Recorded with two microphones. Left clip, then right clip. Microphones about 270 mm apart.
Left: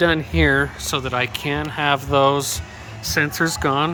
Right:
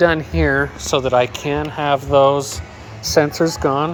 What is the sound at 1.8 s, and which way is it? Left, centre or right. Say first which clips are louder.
Speech: right 3 dB; centre.